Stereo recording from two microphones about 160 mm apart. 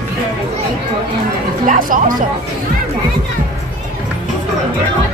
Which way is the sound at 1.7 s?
60° right (ahead or behind).